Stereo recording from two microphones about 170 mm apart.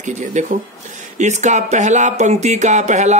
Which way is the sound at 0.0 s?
45° right (ahead or behind).